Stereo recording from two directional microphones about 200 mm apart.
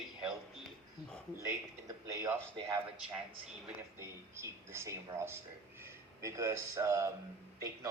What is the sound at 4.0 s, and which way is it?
Speech, 10° right (ahead or behind).